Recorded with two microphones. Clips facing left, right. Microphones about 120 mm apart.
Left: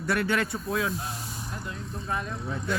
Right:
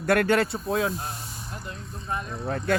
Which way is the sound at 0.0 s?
55° right (ahead or behind).